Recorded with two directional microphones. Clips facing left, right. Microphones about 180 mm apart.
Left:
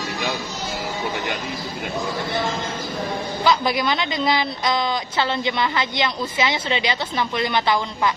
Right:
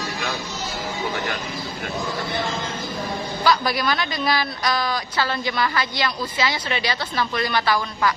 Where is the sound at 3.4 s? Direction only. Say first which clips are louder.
Left 1 dB; 20° left (ahead or behind).